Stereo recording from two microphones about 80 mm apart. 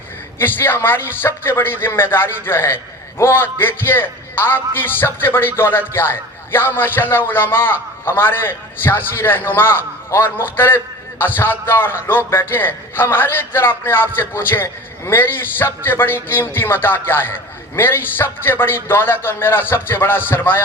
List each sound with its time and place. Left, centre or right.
0.3 s a man's voice: left